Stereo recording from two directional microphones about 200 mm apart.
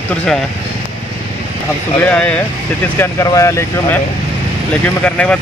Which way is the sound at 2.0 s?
5° left (ahead or behind).